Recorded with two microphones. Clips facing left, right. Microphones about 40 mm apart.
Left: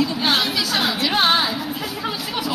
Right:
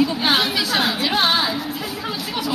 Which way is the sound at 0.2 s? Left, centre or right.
Centre.